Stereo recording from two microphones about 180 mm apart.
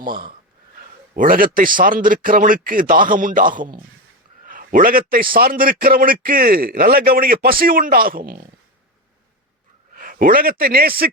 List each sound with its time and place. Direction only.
0.0 s a man's voice: 50° right (ahead or behind)
9.9 s speech: 50° right (ahead or behind)